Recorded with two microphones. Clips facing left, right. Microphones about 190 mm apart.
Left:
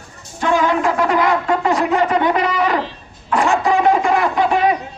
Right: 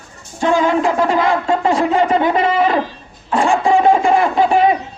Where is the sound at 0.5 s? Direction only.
25° right (ahead or behind).